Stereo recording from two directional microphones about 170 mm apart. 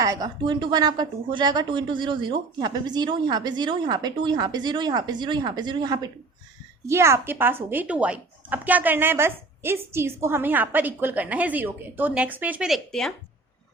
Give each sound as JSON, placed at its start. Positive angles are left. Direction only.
{"t": 0.0, "sound": "a woman's voice", "side_deg": -20}